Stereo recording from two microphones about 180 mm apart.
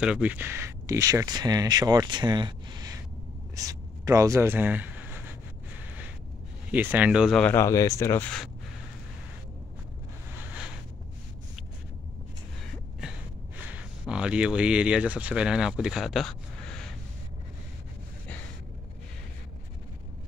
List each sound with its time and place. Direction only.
0.0 s speech: 5° right (ahead or behind)
6.7 s speech: 10° right (ahead or behind)
7.5 s speech: 15° left (ahead or behind)
13.6 s speech: 10° right (ahead or behind)